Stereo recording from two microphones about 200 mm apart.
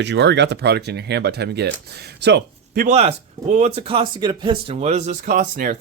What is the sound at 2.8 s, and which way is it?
Speech, 30° right (ahead or behind).